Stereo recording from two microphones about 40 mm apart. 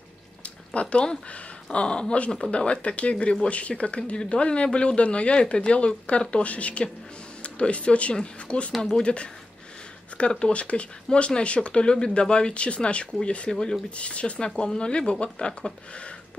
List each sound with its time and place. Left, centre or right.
0.7 s speech: left
10.3 s speech: left
13.5 s speech: centre
13.9 s speech: left